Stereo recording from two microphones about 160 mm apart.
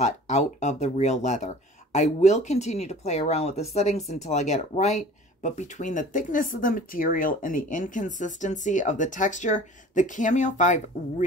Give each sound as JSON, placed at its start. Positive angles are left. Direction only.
{"t": 0.0, "sound": "speech", "side_deg": 45}